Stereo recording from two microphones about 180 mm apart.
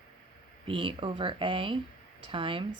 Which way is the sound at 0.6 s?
30° right (ahead or behind).